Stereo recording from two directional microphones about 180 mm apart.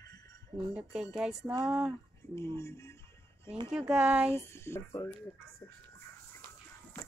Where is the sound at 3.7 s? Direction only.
5° right (ahead or behind).